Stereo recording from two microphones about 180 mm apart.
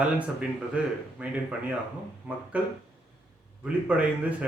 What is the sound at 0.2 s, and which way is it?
A man's voice, 5° right (ahead or behind).